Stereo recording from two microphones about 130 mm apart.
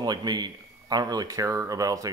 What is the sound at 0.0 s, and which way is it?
Speech, 30° right (ahead or behind).